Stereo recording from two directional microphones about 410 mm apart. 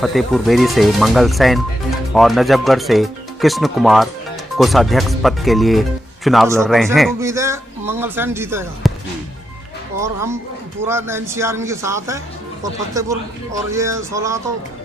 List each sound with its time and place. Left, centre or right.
0.0 s speech: centre
10.0 s speech: centre